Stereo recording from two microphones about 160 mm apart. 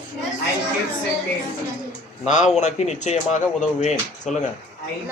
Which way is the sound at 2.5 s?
45° left (ahead or behind).